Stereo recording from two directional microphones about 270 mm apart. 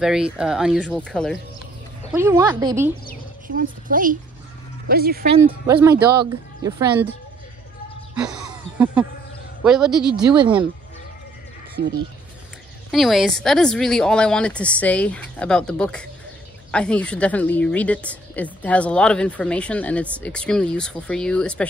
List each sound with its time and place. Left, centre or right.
0.0 s a woman's voice: centre
2.1 s speech: centre
3.4 s a woman's voice: right
5.3 s speech: centre
8.1 s a sound: centre
9.6 s a woman's voice: centre
10.3 s speech: centre
11.8 s a woman's voice: right
12.9 s a woman's voice: centre